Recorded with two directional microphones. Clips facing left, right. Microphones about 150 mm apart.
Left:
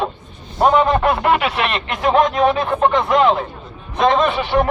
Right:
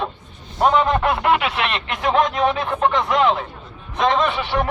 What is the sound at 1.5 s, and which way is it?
Speech, 45° left (ahead or behind).